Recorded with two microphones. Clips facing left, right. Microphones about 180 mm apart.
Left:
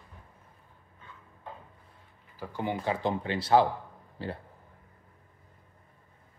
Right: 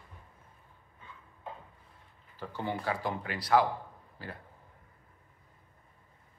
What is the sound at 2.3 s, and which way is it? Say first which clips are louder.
Speech: left 3 dB; 10° left (ahead or behind).